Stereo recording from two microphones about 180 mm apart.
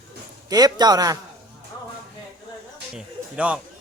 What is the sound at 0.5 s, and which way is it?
Speech, 20° right (ahead or behind).